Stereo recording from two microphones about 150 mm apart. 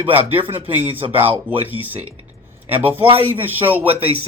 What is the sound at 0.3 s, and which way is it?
Speech, 40° right (ahead or behind).